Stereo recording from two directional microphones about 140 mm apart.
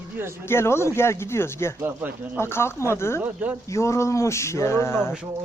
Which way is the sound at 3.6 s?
20° left (ahead or behind).